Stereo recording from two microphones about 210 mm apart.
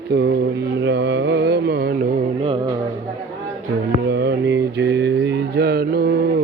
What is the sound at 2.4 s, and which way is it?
Music, 20° right (ahead or behind).